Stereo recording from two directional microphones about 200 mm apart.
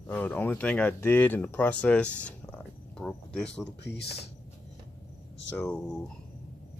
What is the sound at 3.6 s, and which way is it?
Speech, 55° left (ahead or behind).